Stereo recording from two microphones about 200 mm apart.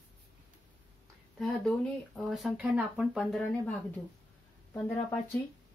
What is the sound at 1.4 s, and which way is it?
Speech, 5° left (ahead or behind).